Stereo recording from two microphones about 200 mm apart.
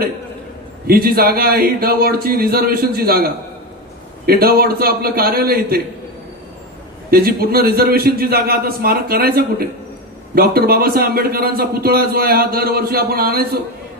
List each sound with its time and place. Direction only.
0.8 s a man's voice: 50° right (ahead or behind)
7.1 s a man's voice: 50° right (ahead or behind)